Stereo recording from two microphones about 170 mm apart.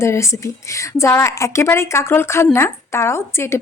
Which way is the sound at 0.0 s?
15° left (ahead or behind).